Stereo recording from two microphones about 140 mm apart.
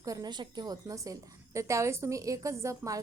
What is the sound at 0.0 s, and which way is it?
A woman's voice, 25° right (ahead or behind).